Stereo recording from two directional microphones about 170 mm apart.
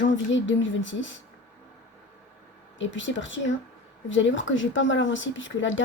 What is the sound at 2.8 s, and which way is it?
Speech, 90° left.